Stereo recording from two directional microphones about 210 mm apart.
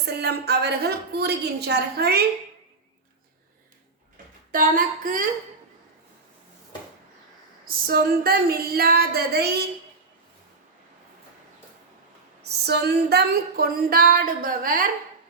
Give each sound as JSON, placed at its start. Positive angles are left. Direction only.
{"t": 0.0, "sound": "speech", "side_deg": -50}
{"t": 4.5, "sound": "female singing", "side_deg": -40}
{"t": 7.6, "sound": "speech", "side_deg": -45}
{"t": 12.5, "sound": "speech", "side_deg": -50}